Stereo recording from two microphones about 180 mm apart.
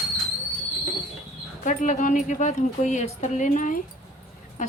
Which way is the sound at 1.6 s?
45° left (ahead or behind).